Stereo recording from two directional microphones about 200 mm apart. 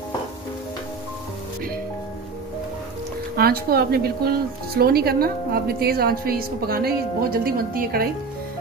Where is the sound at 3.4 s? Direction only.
50° right (ahead or behind).